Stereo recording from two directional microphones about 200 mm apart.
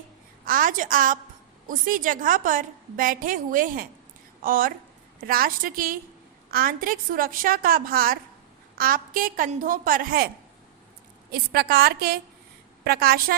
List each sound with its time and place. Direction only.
0.4 s a woman's voice: 45° right (ahead or behind)
11.3 s a woman's voice: 50° right (ahead or behind)